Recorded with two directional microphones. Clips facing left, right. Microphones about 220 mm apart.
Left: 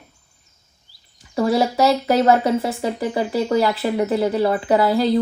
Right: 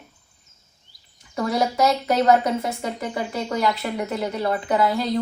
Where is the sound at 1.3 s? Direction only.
30° left (ahead or behind).